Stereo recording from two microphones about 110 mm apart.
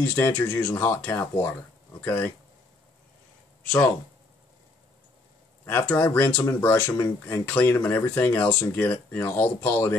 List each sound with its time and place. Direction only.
0.0 s speech: 15° left (ahead or behind)
5.7 s speech: 15° left (ahead or behind)